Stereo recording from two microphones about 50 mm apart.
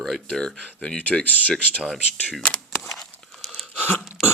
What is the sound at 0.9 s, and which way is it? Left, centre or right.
Speech, left.